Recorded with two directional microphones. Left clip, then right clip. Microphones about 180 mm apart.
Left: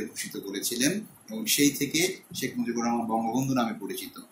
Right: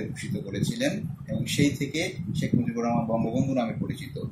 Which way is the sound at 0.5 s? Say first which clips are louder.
Even; 20° right (ahead or behind).